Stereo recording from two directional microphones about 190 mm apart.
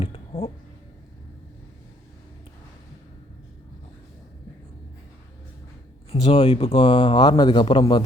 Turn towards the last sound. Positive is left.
turn(degrees=25)  # may be behind; listen again after turning